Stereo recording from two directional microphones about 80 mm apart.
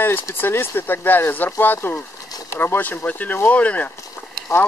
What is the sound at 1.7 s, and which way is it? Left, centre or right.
Speech, left.